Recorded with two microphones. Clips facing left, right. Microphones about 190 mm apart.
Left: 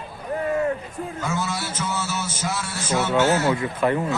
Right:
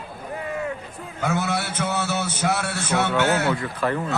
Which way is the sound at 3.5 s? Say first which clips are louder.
Left 3 dB; 20° left (ahead or behind).